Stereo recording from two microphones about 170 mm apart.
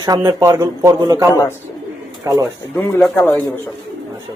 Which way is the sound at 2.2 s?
20° right (ahead or behind).